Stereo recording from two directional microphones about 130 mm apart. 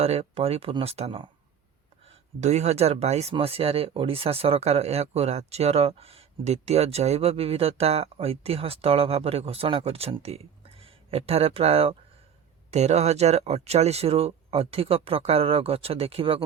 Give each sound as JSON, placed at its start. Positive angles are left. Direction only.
{"t": 0.0, "sound": "speech", "side_deg": -50}
{"t": 2.0, "sound": "speech", "side_deg": -60}